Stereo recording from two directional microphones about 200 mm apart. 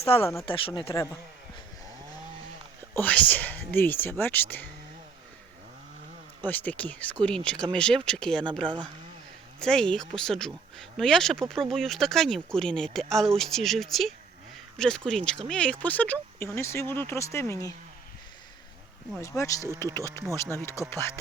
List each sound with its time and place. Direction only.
0.0 s speech: 30° left (ahead or behind)
2.9 s speech: 10° left (ahead or behind)
6.4 s speech: 10° left (ahead or behind)
8.6 s speech: 20° right (ahead or behind)
9.6 s speech: 5° left (ahead or behind)
19.2 s speech: 15° left (ahead or behind)